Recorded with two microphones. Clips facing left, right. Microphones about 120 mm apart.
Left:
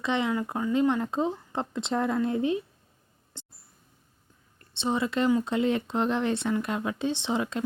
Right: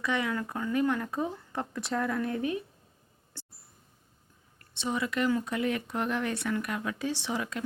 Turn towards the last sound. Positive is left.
turn(degrees=25)  # may be behind; listen again after turning